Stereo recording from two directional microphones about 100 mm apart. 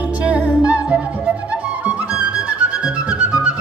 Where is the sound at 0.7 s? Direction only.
15° right (ahead or behind).